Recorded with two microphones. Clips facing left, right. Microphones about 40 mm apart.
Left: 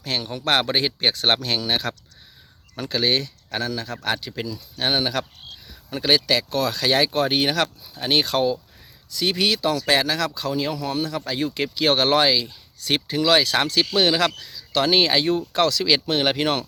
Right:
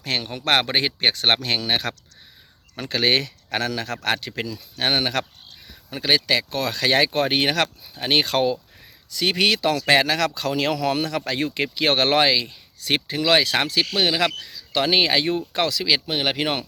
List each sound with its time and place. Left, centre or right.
0.0 s speech: right
3.1 s speech: right
4.1 s speech: right
5.9 s speech: right
7.9 s speech: right
8.2 s speech: right
10.7 s speech: right
11.3 s speech: right; by 14.2 s centre
14.3 s speech: right